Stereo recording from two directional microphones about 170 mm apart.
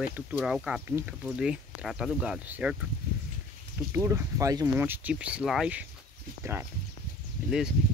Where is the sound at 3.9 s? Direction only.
15° right (ahead or behind).